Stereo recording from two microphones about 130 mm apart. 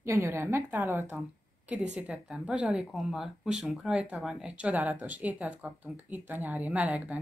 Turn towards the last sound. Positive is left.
turn(degrees=-10)  # may be behind; listen again after turning